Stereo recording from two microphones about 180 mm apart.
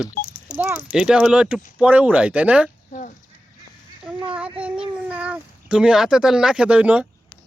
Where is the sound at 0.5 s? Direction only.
10° right (ahead or behind).